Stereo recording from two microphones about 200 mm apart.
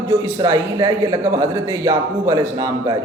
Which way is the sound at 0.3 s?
20° right (ahead or behind).